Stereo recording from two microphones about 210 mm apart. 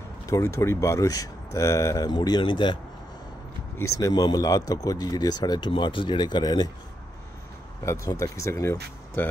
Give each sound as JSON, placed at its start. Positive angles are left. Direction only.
{"t": 0.3, "sound": "speech", "side_deg": 15}
{"t": 4.0, "sound": "speech", "side_deg": 20}
{"t": 7.8, "sound": "speech", "side_deg": 15}